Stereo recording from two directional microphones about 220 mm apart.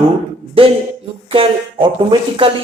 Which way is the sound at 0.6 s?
25° right (ahead or behind).